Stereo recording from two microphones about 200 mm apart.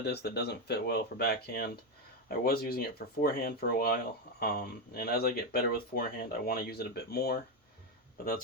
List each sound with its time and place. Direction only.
0.0 s speech: 55° left (ahead or behind)